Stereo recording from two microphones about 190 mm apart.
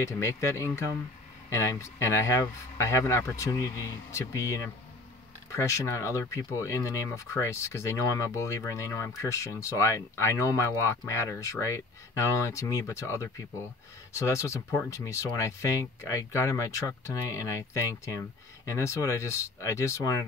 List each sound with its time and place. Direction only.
0.0 s speech: 15° left (ahead or behind)